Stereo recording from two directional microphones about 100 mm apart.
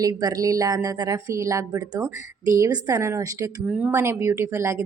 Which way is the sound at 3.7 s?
15° right (ahead or behind).